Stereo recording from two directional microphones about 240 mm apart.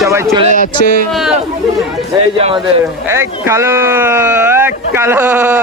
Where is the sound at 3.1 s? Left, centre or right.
Centre.